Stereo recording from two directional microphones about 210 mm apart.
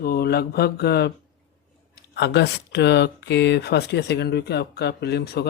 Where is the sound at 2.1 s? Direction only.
55° left (ahead or behind).